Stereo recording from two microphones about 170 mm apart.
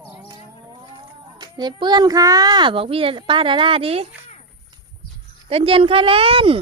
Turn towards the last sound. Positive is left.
turn(degrees=-30)  # may be behind; listen again after turning